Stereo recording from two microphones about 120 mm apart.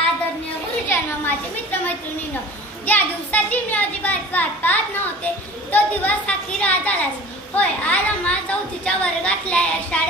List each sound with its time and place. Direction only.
0.8 s a child's voice: 15° left (ahead or behind)